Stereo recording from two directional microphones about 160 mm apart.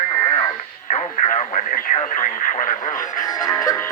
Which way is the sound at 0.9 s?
50° left (ahead or behind).